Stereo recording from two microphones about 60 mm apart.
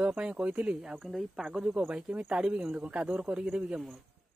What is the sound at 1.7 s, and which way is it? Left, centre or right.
Speech, right.